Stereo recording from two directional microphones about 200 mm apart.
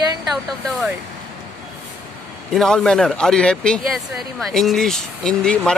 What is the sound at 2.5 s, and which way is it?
Speech, centre (ahead or behind).